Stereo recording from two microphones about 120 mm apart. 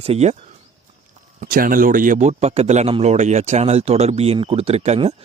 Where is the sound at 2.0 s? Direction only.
80° right.